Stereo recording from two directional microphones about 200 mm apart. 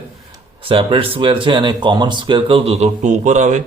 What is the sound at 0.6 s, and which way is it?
Speech, 25° right (ahead or behind).